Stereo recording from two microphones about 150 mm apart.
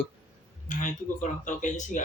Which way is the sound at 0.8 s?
55° left (ahead or behind).